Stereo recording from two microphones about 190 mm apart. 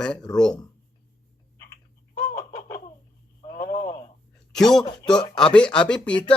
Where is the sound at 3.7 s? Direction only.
20° left (ahead or behind).